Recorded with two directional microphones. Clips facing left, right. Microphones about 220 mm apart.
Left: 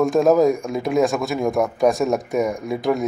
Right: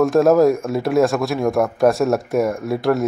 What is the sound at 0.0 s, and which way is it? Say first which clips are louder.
Speech: right 2 dB; centre (ahead or behind).